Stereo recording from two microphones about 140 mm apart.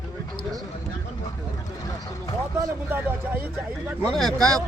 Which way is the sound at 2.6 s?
15° right (ahead or behind).